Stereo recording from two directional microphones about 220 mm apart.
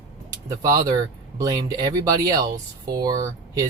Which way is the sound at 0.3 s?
15° right (ahead or behind).